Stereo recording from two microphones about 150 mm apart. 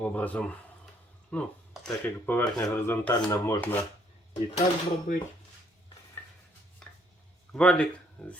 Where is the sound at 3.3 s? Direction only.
20° left (ahead or behind).